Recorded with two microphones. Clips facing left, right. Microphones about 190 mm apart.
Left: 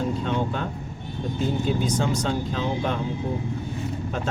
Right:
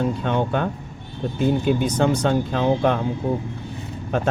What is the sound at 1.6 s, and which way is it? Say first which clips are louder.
Speech: right 5 dB; 60° right (ahead or behind).